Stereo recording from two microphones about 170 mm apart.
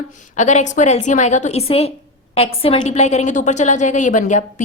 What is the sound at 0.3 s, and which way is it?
A woman's voice, 45° left (ahead or behind).